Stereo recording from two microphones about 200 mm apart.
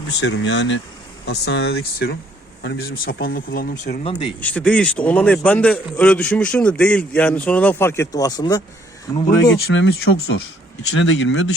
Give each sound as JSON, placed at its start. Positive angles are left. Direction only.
{"t": 0.2, "sound": "speech", "side_deg": 60}
{"t": 4.0, "sound": "speech", "side_deg": 30}
{"t": 4.4, "sound": "a man's voice", "side_deg": 5}
{"t": 9.5, "sound": "speech", "side_deg": 65}
{"t": 10.9, "sound": "speech", "side_deg": 65}